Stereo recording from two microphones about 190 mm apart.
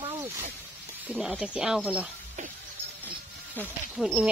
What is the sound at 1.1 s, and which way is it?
Speech, 5° right (ahead or behind).